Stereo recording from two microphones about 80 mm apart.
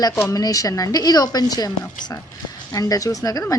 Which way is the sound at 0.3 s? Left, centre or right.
Left.